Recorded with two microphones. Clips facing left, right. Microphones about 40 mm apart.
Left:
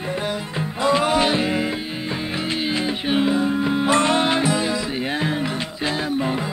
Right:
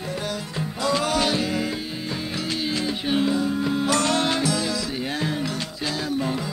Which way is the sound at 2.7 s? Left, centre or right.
Left.